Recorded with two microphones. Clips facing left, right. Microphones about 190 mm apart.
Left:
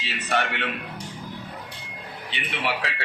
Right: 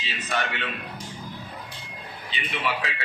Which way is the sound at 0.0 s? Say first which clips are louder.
Left 3 dB; 65° left (ahead or behind).